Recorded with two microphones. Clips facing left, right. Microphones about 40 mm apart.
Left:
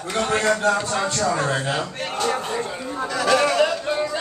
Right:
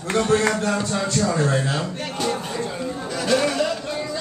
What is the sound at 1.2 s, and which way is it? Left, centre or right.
Speech, left.